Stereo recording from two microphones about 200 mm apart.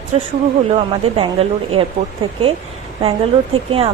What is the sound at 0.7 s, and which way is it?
Speech, 30° right (ahead or behind).